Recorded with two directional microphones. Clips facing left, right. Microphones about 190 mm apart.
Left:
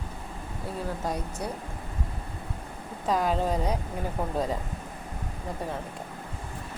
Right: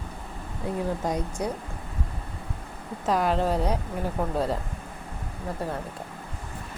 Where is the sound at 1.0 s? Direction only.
15° right (ahead or behind).